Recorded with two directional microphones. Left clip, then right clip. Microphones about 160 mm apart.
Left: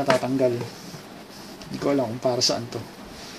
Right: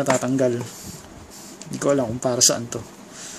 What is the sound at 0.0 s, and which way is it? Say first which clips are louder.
Speech: right 1 dB; 50° right (ahead or behind).